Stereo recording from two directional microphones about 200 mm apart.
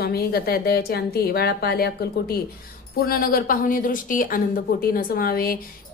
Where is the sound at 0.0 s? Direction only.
50° left (ahead or behind).